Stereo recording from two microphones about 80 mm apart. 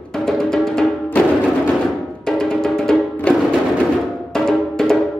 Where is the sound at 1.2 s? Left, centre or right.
Centre.